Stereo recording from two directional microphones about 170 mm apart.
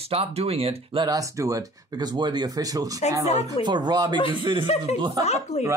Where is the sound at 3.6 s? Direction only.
25° right (ahead or behind).